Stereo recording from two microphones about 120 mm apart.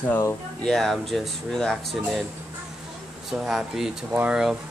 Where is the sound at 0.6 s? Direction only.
5° left (ahead or behind).